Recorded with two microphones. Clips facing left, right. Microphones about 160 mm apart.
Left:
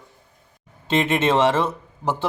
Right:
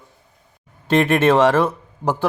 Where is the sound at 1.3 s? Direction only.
10° right (ahead or behind).